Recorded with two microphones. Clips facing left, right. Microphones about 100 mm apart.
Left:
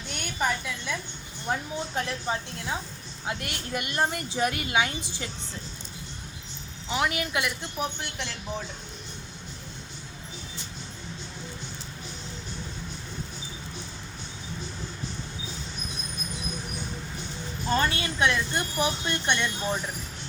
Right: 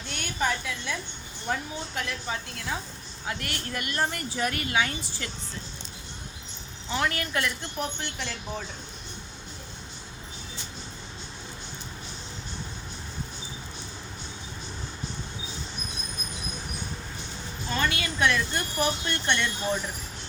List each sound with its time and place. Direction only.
0.1 s a sound: 10° left (ahead or behind)
1.5 s speech: 20° left (ahead or behind)
2.0 s speech: 35° left (ahead or behind)
3.2 s speech: 20° left (ahead or behind)
6.8 s a woman's voice: 10° left (ahead or behind)
17.7 s speech: 35° left (ahead or behind)